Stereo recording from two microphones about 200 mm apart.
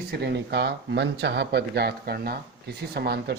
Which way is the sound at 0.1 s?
60° right (ahead or behind).